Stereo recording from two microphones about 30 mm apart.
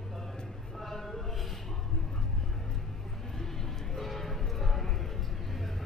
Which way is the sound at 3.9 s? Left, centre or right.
Centre.